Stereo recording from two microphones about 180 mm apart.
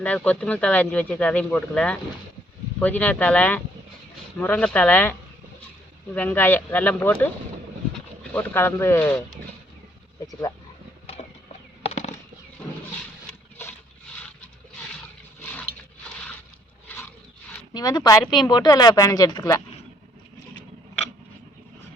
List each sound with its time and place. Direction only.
0.0 s speech: 5° left (ahead or behind)
6.1 s speech: 10° left (ahead or behind)
8.3 s speech: 10° left (ahead or behind)
11.2 s a sound: 40° left (ahead or behind)
16.9 s a sound: 10° left (ahead or behind)
17.7 s speech: 20° left (ahead or behind)